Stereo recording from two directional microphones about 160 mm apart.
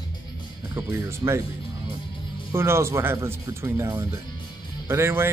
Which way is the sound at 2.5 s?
15° right (ahead or behind).